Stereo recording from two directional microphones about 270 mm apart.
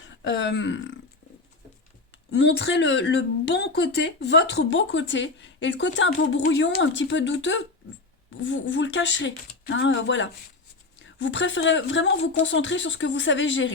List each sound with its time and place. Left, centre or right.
0.3 s speech: left
2.3 s speech: left